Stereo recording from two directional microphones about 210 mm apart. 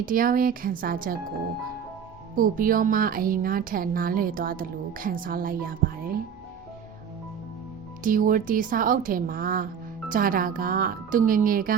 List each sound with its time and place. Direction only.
0.0 s speech: 40° right (ahead or behind)
2.3 s speech: 40° right (ahead or behind)
8.0 s speech: 40° right (ahead or behind)